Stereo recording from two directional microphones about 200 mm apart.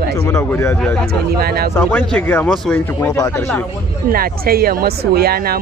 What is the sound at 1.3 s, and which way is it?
Speech, 50° right (ahead or behind).